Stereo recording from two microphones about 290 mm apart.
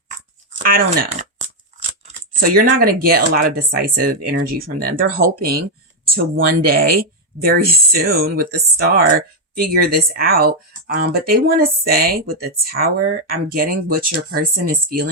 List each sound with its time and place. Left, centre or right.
0.6 s speech: right